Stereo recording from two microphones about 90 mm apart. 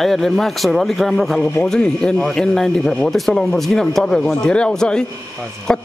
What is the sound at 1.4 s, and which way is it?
Speech, 20° left (ahead or behind).